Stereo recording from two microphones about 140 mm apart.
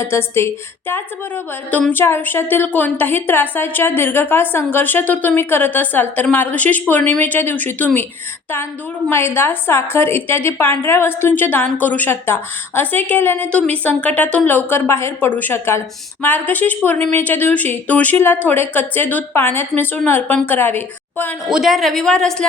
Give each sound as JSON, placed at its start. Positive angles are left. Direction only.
{"t": 0.0, "sound": "a woman's voice", "side_deg": 15}
{"t": 9.0, "sound": "a woman's voice", "side_deg": 15}
{"t": 21.5, "sound": "a woman's voice", "side_deg": 0}